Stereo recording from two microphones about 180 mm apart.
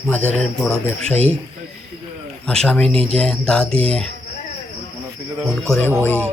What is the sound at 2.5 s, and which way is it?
Speech, 5° left (ahead or behind).